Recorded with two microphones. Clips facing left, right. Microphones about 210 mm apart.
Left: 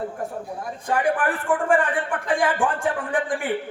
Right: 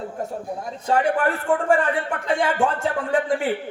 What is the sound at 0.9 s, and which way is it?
Speech, 25° right (ahead or behind).